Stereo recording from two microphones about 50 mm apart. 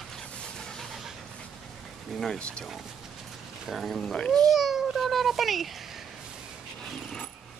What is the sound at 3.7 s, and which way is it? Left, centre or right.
Speech, centre.